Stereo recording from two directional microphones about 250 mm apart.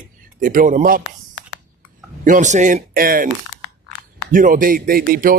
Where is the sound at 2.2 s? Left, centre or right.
Right.